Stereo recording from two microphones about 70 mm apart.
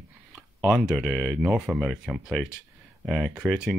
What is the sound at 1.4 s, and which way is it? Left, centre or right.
Speech, centre.